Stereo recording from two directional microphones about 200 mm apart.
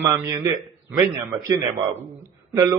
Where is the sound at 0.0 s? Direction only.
15° right (ahead or behind).